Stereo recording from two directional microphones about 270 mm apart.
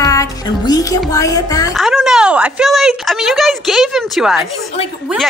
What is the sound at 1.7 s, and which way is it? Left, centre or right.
A woman's voice, centre.